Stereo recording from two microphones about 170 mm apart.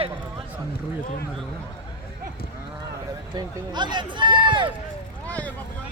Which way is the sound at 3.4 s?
25° right (ahead or behind).